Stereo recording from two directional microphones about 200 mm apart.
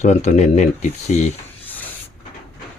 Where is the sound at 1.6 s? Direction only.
10° left (ahead or behind).